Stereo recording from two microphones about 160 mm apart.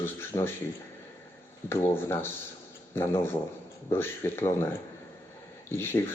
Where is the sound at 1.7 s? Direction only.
15° left (ahead or behind).